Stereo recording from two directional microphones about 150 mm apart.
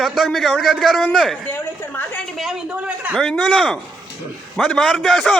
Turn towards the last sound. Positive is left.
turn(degrees=0)  # may be behind; listen again after turning